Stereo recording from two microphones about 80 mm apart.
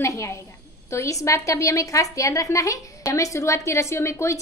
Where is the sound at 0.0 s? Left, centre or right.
Left.